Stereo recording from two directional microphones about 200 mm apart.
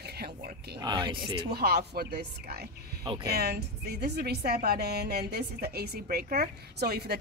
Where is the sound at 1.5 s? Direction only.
50° right (ahead or behind).